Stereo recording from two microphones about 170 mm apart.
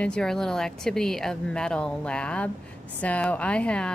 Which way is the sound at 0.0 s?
5° left (ahead or behind).